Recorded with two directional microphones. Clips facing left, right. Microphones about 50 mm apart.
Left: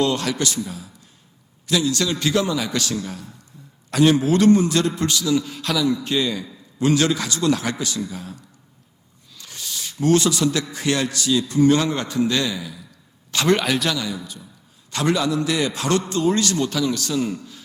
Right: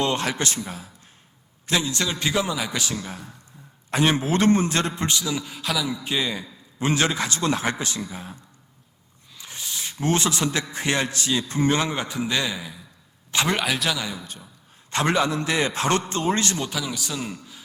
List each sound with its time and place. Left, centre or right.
0.0 s a man's voice: right
11.9 s a man's voice: centre
13.5 s a man's voice: centre
14.8 s a man's voice: right
16.6 s a man's voice: centre